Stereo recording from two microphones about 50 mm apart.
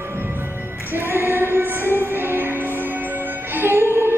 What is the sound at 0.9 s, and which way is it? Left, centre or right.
Music, right.